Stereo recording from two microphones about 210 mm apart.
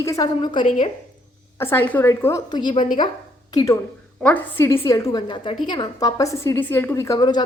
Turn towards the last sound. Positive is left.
turn(degrees=20)  # may be behind; listen again after turning